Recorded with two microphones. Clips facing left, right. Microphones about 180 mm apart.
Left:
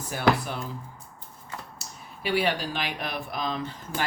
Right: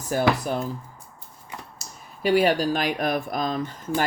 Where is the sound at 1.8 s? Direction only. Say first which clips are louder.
Even; 40° right (ahead or behind).